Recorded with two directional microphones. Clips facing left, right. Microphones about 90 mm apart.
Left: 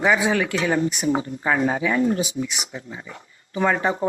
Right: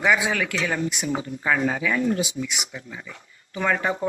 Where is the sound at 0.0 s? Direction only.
30° left (ahead or behind).